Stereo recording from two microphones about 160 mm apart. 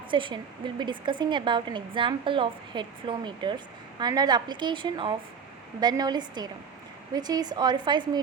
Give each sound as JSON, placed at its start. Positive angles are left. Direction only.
{"t": 0.1, "sound": "a woman's voice", "side_deg": -30}